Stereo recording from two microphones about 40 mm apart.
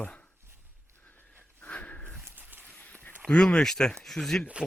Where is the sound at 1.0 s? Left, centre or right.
Left.